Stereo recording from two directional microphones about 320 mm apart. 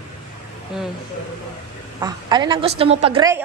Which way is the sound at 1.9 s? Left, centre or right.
Centre.